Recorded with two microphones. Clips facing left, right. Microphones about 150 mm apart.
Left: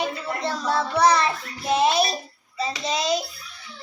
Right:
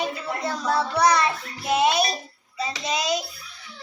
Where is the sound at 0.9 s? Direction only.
30° left (ahead or behind).